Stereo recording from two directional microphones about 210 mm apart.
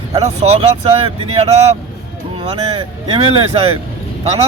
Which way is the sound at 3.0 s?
25° right (ahead or behind).